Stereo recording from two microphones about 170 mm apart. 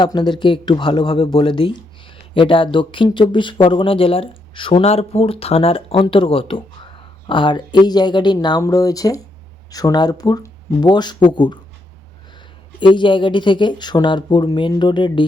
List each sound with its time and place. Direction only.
0.0 s speech: 25° left (ahead or behind)
12.8 s speech: 30° left (ahead or behind)